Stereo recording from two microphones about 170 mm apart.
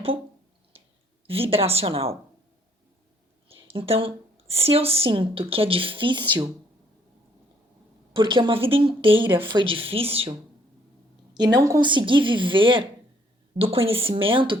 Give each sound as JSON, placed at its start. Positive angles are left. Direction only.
{"t": 1.3, "sound": "a woman's voice", "side_deg": -35}
{"t": 3.5, "sound": "a woman's voice", "side_deg": -35}
{"t": 8.1, "sound": "a woman's voice", "side_deg": -30}
{"t": 11.3, "sound": "a woman's voice", "side_deg": -25}